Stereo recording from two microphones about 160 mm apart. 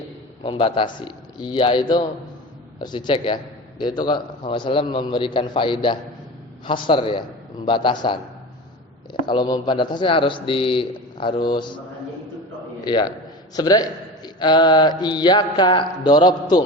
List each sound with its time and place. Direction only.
0.4 s a man's voice: 30° left (ahead or behind)
9.2 s a man's voice: 30° left (ahead or behind)
12.8 s a man's voice: 25° left (ahead or behind)